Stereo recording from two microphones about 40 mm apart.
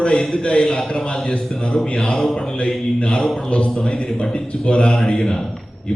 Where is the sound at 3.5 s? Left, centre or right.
Left.